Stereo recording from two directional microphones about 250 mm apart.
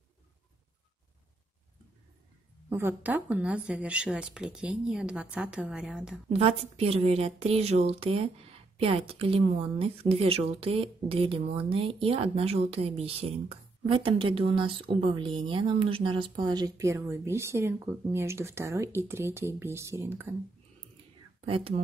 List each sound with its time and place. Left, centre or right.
2.7 s speech: centre
6.2 s a woman's voice: right
21.5 s a woman's voice: right